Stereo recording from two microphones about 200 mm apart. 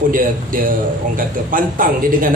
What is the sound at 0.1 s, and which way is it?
Speech, 45° right (ahead or behind).